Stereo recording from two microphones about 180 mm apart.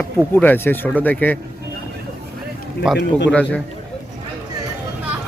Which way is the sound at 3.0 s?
75° left (ahead or behind).